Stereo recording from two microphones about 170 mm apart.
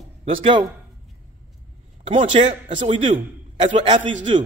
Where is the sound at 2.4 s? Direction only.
35° right (ahead or behind).